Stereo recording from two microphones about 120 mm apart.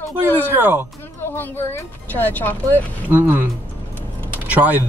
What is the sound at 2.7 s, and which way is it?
Speech, 15° right (ahead or behind).